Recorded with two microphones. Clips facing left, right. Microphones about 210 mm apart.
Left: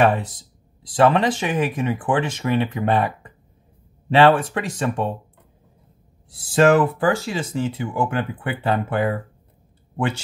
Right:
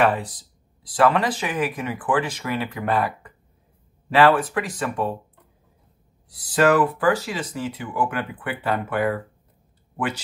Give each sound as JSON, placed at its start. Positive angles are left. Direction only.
{"t": 0.0, "sound": "speech", "side_deg": 25}
{"t": 6.3, "sound": "speech", "side_deg": 25}